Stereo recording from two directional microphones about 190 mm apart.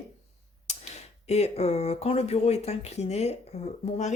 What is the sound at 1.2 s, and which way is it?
Speech, 35° left (ahead or behind).